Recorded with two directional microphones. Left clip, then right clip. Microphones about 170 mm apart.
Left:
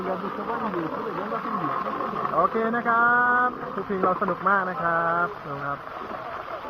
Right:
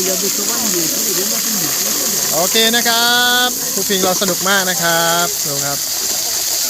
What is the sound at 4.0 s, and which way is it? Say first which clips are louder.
Speech: right 3 dB; 50° right (ahead or behind).